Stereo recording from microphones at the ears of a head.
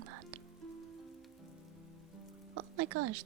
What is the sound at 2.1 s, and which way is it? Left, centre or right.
Music, right.